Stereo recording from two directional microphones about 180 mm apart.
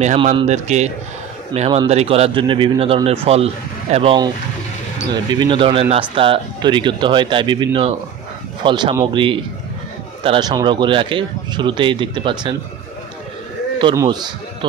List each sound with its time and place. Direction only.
0.0 s speech: 35° right (ahead or behind)
13.9 s a man's voice: 25° right (ahead or behind)